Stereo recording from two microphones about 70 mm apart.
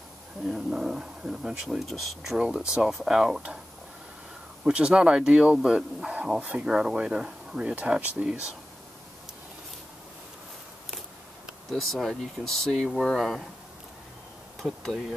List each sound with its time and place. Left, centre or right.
0.5 s speech: centre
2.3 s speech: centre
4.6 s speech: centre
10.9 s speech: centre
14.6 s bee: centre